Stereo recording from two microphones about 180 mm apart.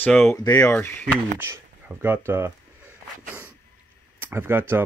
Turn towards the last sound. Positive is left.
turn(degrees=-10)  # may be behind; listen again after turning